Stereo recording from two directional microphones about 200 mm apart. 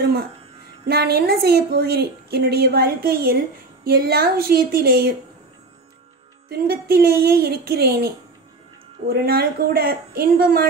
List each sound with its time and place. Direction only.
0.8 s a woman's voice: 55° right (ahead or behind)
6.5 s a woman's voice: 50° right (ahead or behind)